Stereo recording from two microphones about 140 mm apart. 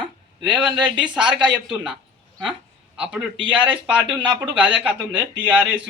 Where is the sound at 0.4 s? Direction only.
5° right (ahead or behind).